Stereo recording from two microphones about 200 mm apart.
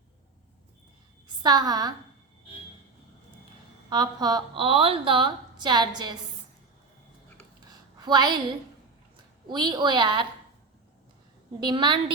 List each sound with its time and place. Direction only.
1.4 s a woman's voice: 20° right (ahead or behind)
3.8 s a woman's voice: 20° right (ahead or behind)
7.6 s a sound: 20° right (ahead or behind)
9.5 s a woman's voice: 20° right (ahead or behind)
11.6 s a woman's voice: 20° right (ahead or behind)